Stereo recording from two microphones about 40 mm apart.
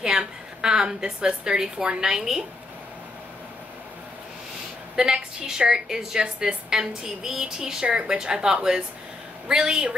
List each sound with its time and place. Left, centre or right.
0.0 s a woman's voice: centre
4.9 s a woman's voice: centre